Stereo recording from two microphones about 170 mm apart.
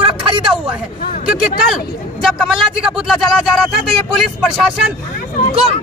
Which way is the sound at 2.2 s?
5° right (ahead or behind).